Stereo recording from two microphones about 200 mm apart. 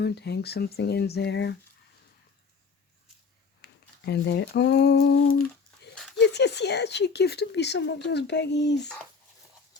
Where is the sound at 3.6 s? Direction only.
55° left (ahead or behind); by 5.4 s 80° left.